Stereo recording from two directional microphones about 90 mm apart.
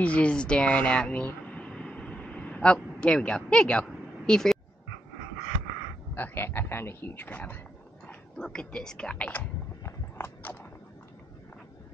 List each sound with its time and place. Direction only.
0.0 s speech: 15° left (ahead or behind)
6.1 s speech: 20° left (ahead or behind)
8.1 s speech: 5° left (ahead or behind)
9.8 s biting: 25° left (ahead or behind)